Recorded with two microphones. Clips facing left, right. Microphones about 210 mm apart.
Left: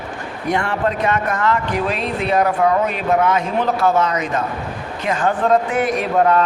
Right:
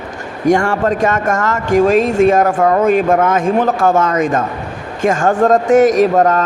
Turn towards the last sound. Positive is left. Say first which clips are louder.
# right 5 dB
turn(degrees=-45)  # may be behind; listen again after turning